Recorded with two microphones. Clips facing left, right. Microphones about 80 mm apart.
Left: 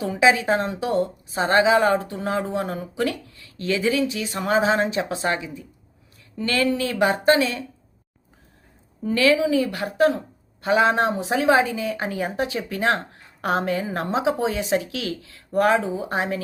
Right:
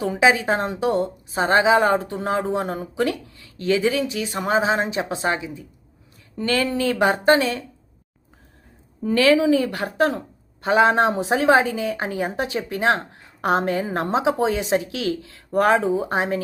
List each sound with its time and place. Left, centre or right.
0.0 s a woman's voice: right
9.0 s a woman's voice: right
11.1 s a woman's voice: right